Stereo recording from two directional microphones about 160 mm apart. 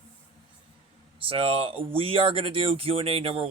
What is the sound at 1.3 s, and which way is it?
Speech, 35° right (ahead or behind).